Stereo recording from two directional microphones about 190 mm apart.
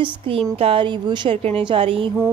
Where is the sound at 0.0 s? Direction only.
30° right (ahead or behind).